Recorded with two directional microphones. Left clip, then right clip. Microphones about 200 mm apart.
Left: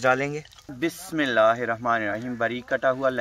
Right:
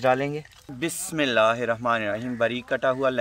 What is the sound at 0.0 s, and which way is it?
Speech, 15° right (ahead or behind).